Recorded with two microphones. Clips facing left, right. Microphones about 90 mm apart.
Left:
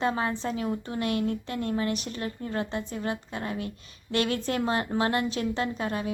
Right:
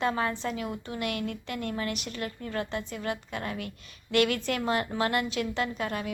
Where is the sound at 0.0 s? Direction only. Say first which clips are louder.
Left 1 dB; 25° left (ahead or behind).